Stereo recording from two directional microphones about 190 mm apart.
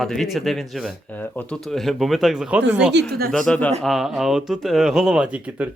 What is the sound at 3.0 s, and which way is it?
Speech, 65° right (ahead or behind).